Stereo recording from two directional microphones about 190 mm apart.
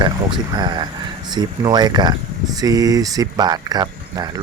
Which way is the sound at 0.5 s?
25° right (ahead or behind).